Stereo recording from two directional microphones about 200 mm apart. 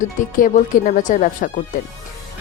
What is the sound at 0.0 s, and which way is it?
Speech, 40° left (ahead or behind).